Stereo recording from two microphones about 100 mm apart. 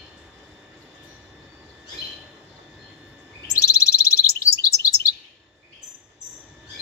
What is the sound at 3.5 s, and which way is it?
Chirp, 35° left (ahead or behind).